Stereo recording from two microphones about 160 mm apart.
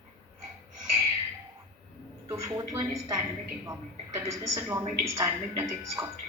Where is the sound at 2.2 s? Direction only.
20° right (ahead or behind).